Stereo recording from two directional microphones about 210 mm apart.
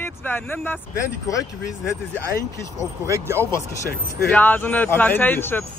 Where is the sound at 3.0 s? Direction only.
15° right (ahead or behind).